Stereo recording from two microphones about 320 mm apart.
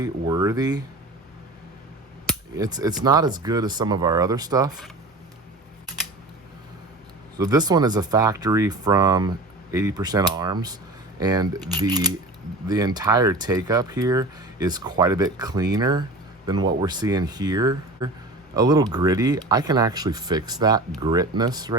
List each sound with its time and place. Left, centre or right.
0.0 s speech: centre
2.6 s speech: centre
7.3 s speech: centre